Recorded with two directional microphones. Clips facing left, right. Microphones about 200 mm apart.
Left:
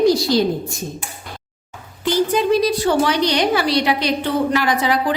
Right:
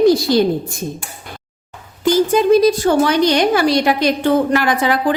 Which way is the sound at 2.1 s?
45° right (ahead or behind).